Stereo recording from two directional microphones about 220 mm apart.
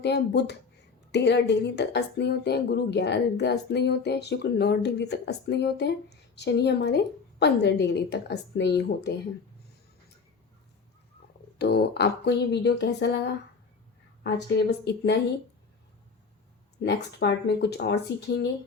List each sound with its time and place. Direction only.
0.0 s speech: 50° left (ahead or behind)
11.5 s speech: 50° left (ahead or behind)
14.3 s speech: 50° left (ahead or behind)
16.8 s speech: 50° left (ahead or behind)